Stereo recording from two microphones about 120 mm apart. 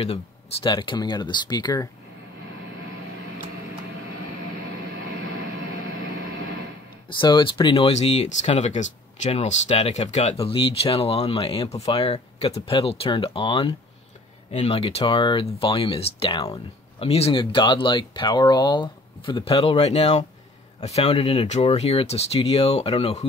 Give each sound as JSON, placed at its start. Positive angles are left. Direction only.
{"t": 0.0, "sound": "speech", "side_deg": 50}
{"t": 7.2, "sound": "speech", "side_deg": 40}
{"t": 7.9, "sound": "speech", "side_deg": 60}
{"t": 10.4, "sound": "speech", "side_deg": 50}